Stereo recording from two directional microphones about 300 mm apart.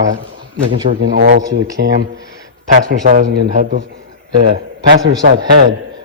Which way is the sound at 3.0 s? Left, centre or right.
Right.